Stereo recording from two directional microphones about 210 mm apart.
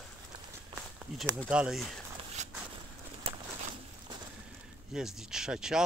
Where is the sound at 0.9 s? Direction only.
5° right (ahead or behind).